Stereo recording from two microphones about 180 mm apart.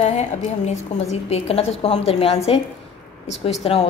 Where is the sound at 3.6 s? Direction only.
30° left (ahead or behind).